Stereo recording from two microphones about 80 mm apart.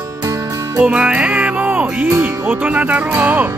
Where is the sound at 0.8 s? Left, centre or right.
Centre.